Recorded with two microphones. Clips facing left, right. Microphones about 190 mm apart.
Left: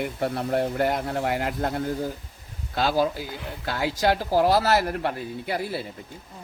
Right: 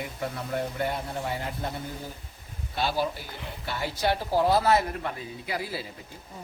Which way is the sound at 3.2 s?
90° left.